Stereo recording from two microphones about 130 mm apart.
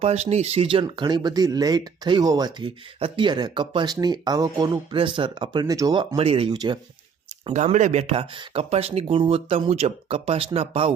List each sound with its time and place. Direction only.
0.0 s speech: 55° right (ahead or behind); by 6.1 s 30° right (ahead or behind)
6.1 s speech: 45° right (ahead or behind)
6.5 s speech: 35° right (ahead or behind)
7.5 s speech: 70° right (ahead or behind); by 10.9 s 50° right (ahead or behind)